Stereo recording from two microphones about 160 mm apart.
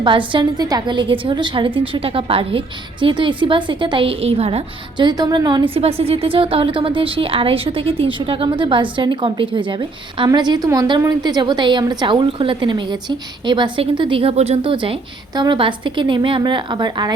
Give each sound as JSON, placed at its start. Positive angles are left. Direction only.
{"t": 0.0, "sound": "a woman's voice", "side_deg": -30}
{"t": 5.7, "sound": "a woman's voice", "side_deg": -40}